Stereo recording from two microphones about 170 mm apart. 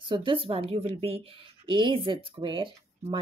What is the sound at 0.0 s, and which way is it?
A woman's voice, 30° right (ahead or behind).